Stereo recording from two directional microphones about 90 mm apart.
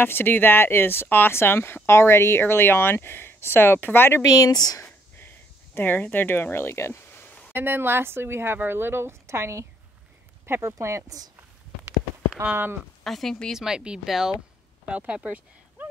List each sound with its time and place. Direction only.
0.0 s speech: 25° left (ahead or behind)
4.2 s speech: 40° left (ahead or behind)
5.8 s speech: 20° left (ahead or behind)
7.5 s speech: 25° right (ahead or behind)
12.4 s speech: 20° right (ahead or behind)
13.0 s speech: 5° left (ahead or behind)
13.6 s speech: 10° right (ahead or behind)